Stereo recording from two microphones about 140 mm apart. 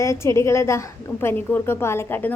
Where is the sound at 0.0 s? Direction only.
20° left (ahead or behind).